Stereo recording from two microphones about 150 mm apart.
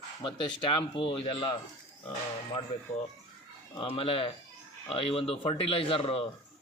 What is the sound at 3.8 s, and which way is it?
A man's voice, 35° left (ahead or behind).